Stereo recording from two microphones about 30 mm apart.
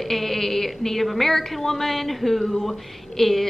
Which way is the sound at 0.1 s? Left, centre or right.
Centre.